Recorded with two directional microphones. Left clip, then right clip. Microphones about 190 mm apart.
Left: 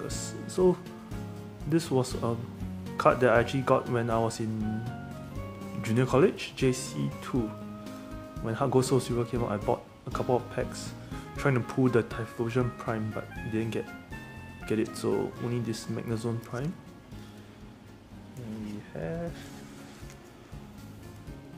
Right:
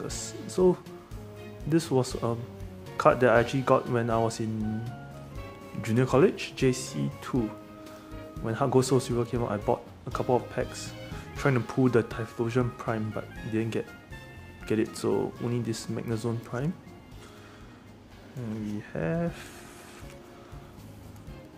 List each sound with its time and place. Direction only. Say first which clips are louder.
0.0 s music: right 1 dB; 5° right (ahead or behind)
1.7 s speech: right 2 dB; 5° right (ahead or behind)
18.9 s speech: right 5 dB; 30° right (ahead or behind)